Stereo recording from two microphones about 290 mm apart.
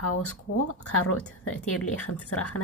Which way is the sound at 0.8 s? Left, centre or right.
Left.